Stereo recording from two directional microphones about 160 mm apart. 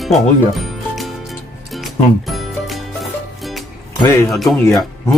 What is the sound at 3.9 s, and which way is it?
Speech, 25° left (ahead or behind).